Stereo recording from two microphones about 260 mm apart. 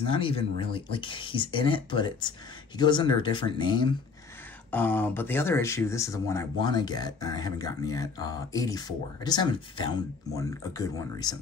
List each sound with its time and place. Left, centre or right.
0.1 s speech: centre
4.6 s speech: centre